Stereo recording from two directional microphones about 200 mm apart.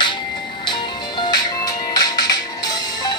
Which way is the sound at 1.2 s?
20° left (ahead or behind).